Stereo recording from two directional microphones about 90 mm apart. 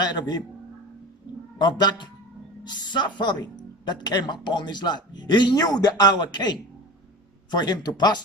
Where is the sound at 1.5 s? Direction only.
55° left (ahead or behind).